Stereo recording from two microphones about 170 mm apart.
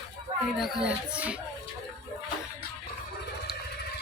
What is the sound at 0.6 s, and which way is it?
Speech, 5° right (ahead or behind).